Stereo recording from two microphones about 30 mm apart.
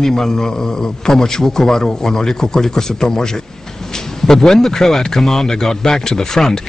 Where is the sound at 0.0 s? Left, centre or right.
Centre.